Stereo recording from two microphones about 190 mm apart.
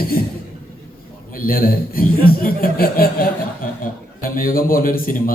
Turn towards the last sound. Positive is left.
turn(degrees=50)  # may be behind; listen again after turning